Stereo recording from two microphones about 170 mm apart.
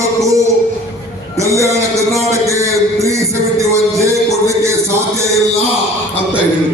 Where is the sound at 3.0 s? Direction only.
15° right (ahead or behind).